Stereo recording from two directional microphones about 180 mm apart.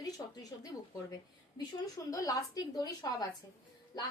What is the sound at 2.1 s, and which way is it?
A woman's voice, 20° left (ahead or behind).